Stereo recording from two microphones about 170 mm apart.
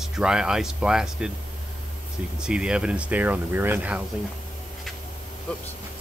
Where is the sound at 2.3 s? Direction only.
5° right (ahead or behind).